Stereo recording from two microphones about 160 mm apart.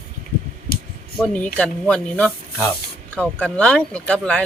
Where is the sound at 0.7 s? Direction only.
70° left (ahead or behind).